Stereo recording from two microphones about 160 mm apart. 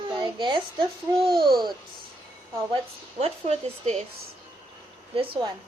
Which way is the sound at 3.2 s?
45° right (ahead or behind).